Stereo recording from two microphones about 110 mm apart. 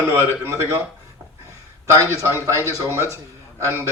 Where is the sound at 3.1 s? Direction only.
25° right (ahead or behind).